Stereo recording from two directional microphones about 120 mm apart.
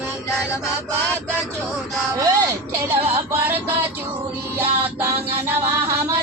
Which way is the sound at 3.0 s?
50° right (ahead or behind).